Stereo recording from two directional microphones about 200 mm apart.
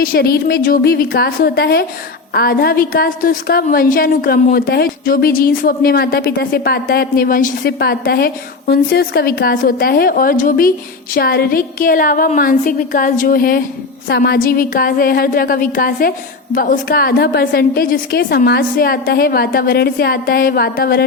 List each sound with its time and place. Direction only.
0.0 s a woman's voice: 50° left (ahead or behind)